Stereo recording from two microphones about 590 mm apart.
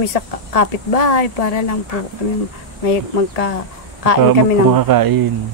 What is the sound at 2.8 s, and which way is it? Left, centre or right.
Speech, left.